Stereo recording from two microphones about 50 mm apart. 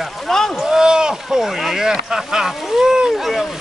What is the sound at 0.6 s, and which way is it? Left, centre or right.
Speech, centre.